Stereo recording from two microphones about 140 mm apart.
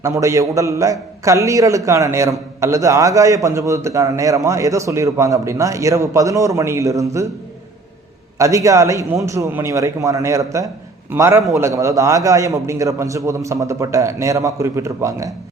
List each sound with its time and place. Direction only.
0.0 s a man's voice: 20° right (ahead or behind)
8.4 s a man's voice: 20° right (ahead or behind)